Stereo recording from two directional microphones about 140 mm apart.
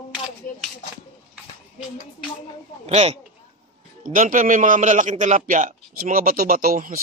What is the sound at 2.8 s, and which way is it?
Speech, 50° right (ahead or behind).